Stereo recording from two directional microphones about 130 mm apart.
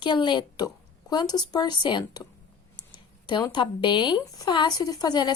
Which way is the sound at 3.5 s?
35° left (ahead or behind).